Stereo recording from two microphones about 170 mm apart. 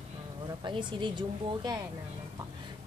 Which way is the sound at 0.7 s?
30° right (ahead or behind).